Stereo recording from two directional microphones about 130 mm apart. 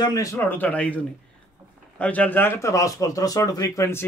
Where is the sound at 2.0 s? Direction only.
10° left (ahead or behind).